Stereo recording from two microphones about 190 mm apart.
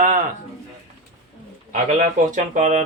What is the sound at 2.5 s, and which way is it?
Speech, 35° right (ahead or behind).